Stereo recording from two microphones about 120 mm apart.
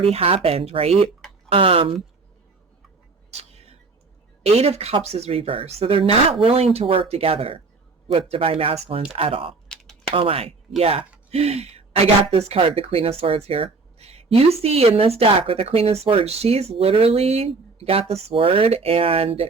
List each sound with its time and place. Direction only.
0.0 s speech: 55° right (ahead or behind)
3.3 s whispering: 60° right (ahead or behind)
4.4 s speech: 60° right (ahead or behind)
9.6 s a sound: 5° left (ahead or behind)
10.2 s speech: 50° right (ahead or behind)